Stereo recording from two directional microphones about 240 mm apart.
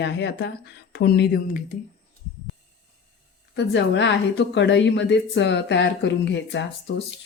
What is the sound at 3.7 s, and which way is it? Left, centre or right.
A woman's voice, left.